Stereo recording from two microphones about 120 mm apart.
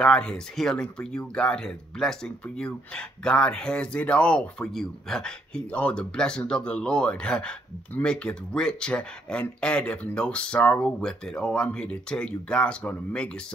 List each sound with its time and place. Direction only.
0.0 s speech: 5° left (ahead or behind)